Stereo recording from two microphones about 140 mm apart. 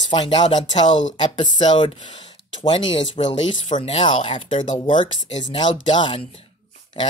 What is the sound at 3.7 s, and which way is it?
Speech, 55° left (ahead or behind).